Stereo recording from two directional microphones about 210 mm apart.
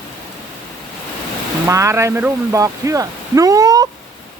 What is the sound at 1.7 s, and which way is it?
Speech, 15° right (ahead or behind).